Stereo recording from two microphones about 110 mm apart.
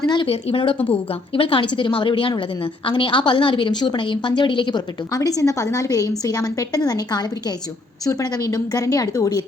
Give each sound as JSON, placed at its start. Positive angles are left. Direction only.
{"t": 0.3, "sound": "a woman's voice", "side_deg": 60}